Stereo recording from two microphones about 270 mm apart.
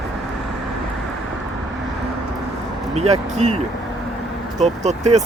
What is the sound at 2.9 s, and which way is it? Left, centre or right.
Speech, right.